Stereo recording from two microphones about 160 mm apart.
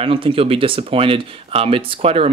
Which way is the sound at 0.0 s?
35° right (ahead or behind).